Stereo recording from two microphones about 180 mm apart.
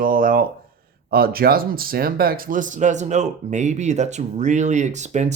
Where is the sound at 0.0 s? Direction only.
50° right (ahead or behind).